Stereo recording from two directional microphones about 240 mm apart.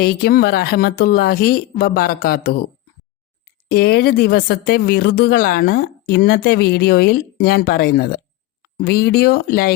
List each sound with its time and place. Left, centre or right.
0.0 s speech: left
3.7 s speech: left